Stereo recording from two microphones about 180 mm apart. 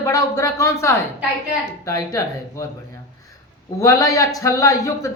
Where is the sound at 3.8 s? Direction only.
20° left (ahead or behind).